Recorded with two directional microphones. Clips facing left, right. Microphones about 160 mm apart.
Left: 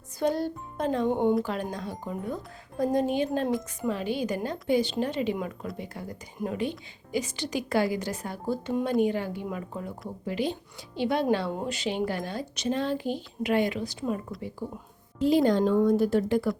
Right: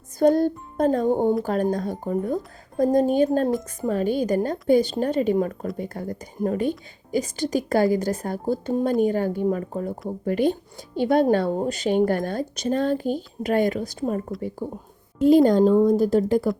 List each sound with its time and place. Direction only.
0.2 s a child's voice: 45° right (ahead or behind)